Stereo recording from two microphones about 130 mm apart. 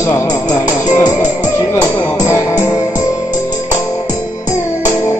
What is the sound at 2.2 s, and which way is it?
Music, 25° left (ahead or behind).